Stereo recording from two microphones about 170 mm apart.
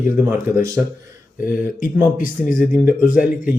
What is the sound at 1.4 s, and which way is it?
Speech, 50° left (ahead or behind).